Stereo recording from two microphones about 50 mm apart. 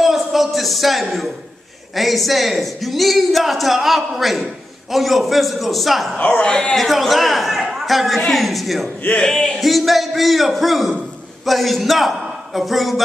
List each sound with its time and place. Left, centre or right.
0.0 s a sound: centre
2.0 s a woman's voice: centre
6.1 s a man's voice: left
6.4 s a woman's voice: centre
9.1 s speech: centre
9.6 s a woman's voice: centre